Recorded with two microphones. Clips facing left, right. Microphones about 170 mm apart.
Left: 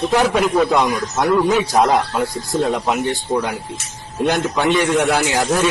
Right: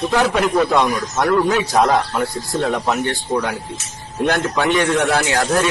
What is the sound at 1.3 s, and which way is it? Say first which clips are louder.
Speech: left 1 dB; centre (ahead or behind).